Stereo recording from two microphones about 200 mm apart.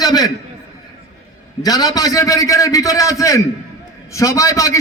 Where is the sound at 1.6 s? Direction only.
20° left (ahead or behind).